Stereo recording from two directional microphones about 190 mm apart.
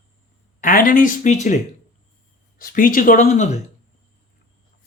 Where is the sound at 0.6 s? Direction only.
45° left (ahead or behind).